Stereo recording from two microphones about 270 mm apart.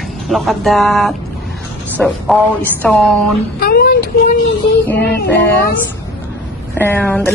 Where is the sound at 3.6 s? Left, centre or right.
Left.